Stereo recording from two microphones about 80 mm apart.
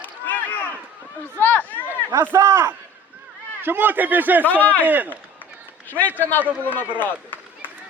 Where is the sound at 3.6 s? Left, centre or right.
Right.